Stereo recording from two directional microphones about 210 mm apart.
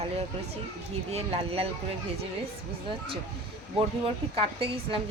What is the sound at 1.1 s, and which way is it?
Speech, 30° right (ahead or behind).